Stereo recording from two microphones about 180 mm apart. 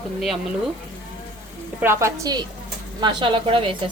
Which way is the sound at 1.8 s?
15° right (ahead or behind).